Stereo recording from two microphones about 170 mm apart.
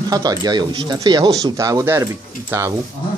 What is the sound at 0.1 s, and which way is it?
Speech, 25° right (ahead or behind).